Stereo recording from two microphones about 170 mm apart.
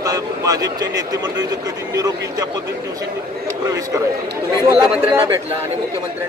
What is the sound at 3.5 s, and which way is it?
Speech, 20° right (ahead or behind).